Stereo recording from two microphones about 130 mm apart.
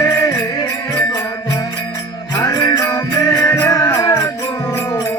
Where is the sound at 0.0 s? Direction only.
25° left (ahead or behind).